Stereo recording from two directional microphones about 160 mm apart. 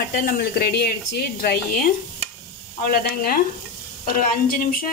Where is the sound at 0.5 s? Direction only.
80° left.